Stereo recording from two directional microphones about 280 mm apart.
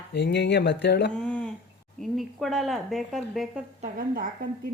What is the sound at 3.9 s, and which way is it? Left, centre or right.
Speech, right.